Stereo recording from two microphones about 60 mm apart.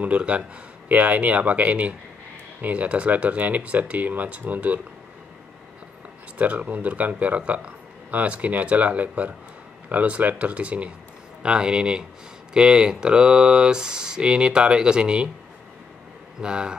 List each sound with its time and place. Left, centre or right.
0.0 s speech: right
6.3 s speech: right
16.3 s speech: centre